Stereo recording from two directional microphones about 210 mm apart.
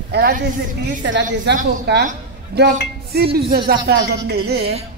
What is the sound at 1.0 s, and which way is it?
A woman's voice, 60° right (ahead or behind).